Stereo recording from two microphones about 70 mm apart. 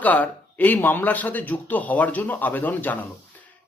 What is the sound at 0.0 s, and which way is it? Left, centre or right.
A man's voice, left.